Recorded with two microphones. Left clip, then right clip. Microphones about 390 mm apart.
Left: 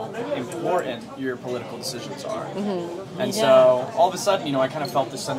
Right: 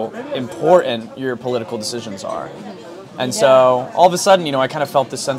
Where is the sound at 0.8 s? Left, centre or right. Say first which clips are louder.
Right 7 dB; right.